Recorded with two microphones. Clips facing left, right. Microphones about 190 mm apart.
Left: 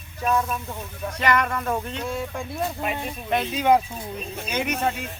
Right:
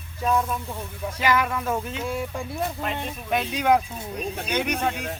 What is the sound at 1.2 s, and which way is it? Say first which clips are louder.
Speech: even; 5° right (ahead or behind).